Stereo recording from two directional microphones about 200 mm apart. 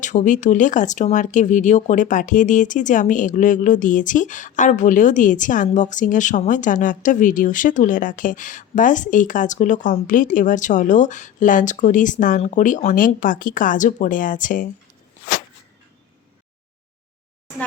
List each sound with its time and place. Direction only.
0.0 s speech: 40° left (ahead or behind)